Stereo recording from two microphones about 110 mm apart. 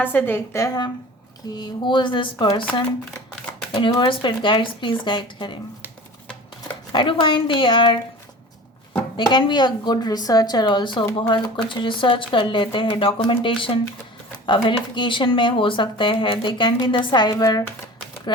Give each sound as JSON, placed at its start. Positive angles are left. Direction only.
{"t": 0.0, "sound": "a woman's voice", "side_deg": 15}
{"t": 1.5, "sound": "speech", "side_deg": 45}
{"t": 3.9, "sound": "speech", "side_deg": 45}
{"t": 6.9, "sound": "speech", "side_deg": 50}
{"t": 8.9, "sound": "speech", "side_deg": 40}